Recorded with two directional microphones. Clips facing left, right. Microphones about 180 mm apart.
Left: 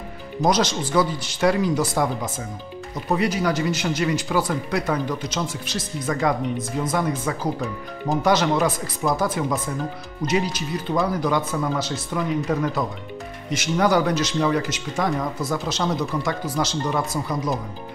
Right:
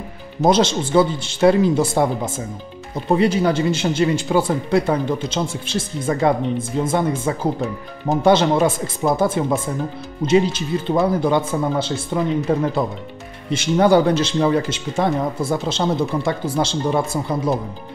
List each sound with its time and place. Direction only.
0.5 s speech: 25° right (ahead or behind)